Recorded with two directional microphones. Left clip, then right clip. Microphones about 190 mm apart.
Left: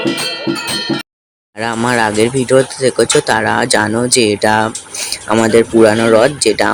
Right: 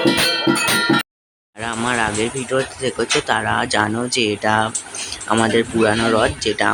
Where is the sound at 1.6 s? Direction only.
30° left (ahead or behind).